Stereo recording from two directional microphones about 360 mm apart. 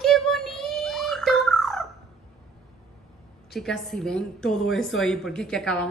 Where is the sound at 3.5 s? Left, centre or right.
Centre.